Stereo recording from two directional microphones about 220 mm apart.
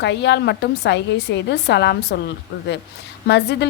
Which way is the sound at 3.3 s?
50° left (ahead or behind).